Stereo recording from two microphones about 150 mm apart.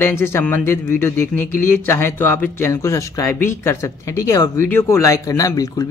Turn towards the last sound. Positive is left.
turn(degrees=25)  # may be behind; listen again after turning